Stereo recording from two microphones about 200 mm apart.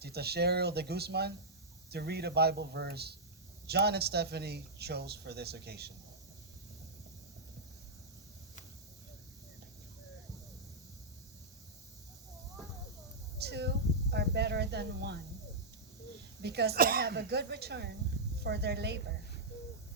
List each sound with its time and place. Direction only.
0.0 s speech: 55° right (ahead or behind)
13.4 s a sound: 55° right (ahead or behind)
16.4 s speech: 55° right (ahead or behind)